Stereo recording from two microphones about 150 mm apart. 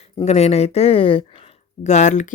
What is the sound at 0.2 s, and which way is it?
Speech, 45° left (ahead or behind).